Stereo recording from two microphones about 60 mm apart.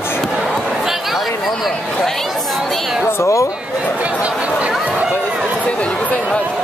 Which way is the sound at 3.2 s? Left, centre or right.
Left.